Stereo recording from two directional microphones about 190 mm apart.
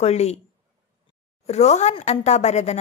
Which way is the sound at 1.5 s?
35° left (ahead or behind).